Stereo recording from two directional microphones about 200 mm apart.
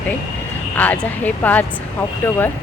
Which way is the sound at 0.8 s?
10° left (ahead or behind).